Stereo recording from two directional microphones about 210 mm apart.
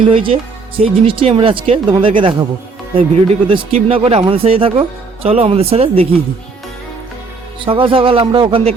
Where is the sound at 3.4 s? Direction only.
25° right (ahead or behind).